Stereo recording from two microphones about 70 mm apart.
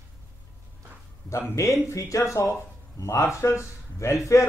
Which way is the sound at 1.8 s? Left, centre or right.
Left.